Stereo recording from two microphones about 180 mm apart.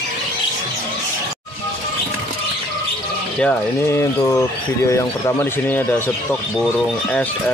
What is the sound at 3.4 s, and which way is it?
Speech, 10° left (ahead or behind).